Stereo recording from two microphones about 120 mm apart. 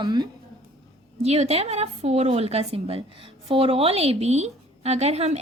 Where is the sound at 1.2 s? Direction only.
65° right (ahead or behind).